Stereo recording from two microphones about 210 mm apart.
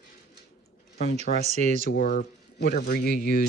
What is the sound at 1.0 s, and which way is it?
Speech, 30° right (ahead or behind).